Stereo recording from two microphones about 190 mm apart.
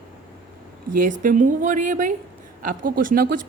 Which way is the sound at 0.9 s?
45° right (ahead or behind).